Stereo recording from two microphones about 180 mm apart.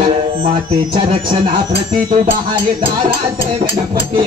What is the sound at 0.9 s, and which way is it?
Speech, 25° right (ahead or behind).